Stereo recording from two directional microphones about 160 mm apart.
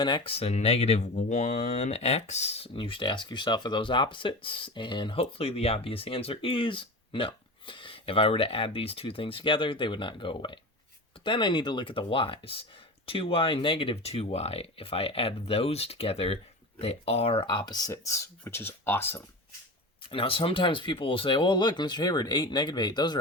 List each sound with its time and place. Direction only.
0.0 s speech: 35° left (ahead or behind); by 19.2 s 15° left (ahead or behind)
20.1 s speech: 35° left (ahead or behind)